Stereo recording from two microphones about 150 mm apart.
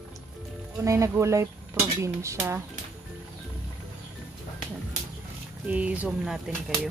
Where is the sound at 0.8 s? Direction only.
20° right (ahead or behind).